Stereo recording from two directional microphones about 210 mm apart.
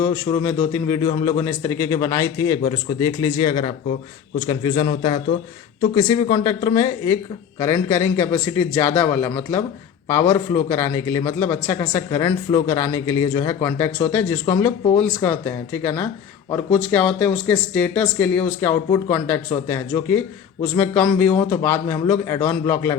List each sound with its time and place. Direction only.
0.0 s speech: 15° left (ahead or behind)